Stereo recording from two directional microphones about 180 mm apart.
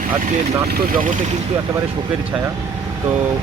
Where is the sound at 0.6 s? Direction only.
55° right (ahead or behind).